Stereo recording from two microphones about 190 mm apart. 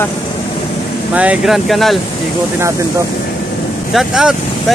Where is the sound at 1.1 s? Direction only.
5° right (ahead or behind).